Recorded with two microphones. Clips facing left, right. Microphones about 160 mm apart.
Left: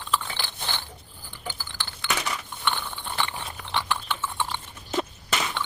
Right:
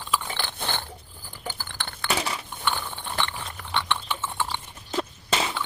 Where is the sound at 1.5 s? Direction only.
55° right (ahead or behind).